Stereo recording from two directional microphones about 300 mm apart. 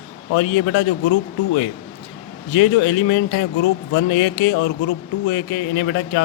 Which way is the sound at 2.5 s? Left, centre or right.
Left.